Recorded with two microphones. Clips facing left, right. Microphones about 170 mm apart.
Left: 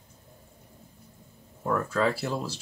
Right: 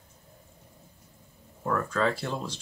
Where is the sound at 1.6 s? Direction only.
5° left (ahead or behind).